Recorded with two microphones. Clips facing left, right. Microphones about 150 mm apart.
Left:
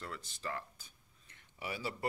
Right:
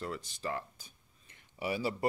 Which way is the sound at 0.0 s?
15° right (ahead or behind).